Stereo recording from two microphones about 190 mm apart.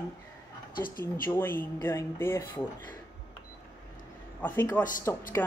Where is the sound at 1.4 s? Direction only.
10° left (ahead or behind).